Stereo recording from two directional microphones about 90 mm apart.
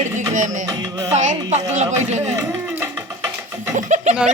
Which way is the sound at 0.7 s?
45° right (ahead or behind).